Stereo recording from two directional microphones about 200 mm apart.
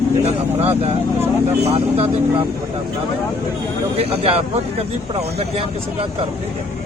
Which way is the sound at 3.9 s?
30° right (ahead or behind).